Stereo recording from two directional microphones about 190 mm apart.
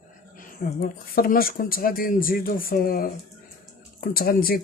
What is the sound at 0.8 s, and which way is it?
Speech, 50° left (ahead or behind).